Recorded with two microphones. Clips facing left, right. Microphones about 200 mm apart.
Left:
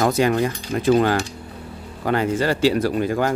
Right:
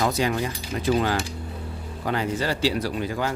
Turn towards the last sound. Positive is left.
turn(degrees=50)  # may be behind; listen again after turning